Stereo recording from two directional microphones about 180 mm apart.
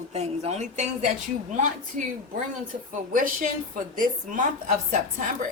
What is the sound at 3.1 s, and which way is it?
Speech, 50° right (ahead or behind).